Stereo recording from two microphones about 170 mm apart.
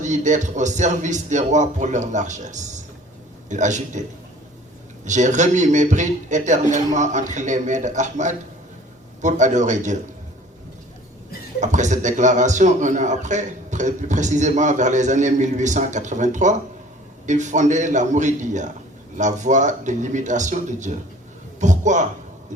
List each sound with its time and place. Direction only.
0.0 s a man's voice: 45° right (ahead or behind)
5.0 s a man's voice: 45° right (ahead or behind)
11.6 s a man's voice: 45° right (ahead or behind)